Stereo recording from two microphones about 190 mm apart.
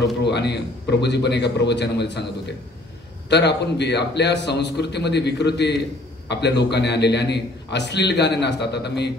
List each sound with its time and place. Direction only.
0.0 s a man's voice: 60° left (ahead or behind)